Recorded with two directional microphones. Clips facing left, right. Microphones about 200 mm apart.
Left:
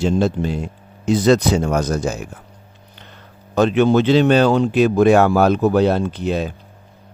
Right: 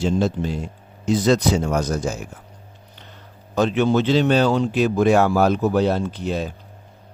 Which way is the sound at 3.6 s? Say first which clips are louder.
Left 4 dB; 60° left (ahead or behind).